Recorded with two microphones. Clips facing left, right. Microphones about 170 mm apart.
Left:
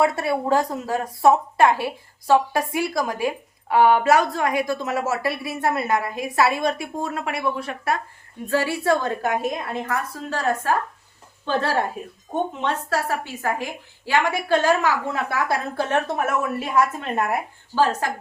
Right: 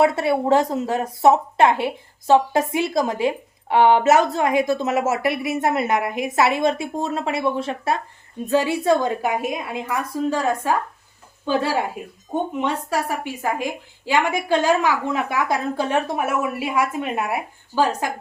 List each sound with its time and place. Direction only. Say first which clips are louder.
0.0 s a woman's voice: right 3 dB; 20° right (ahead or behind)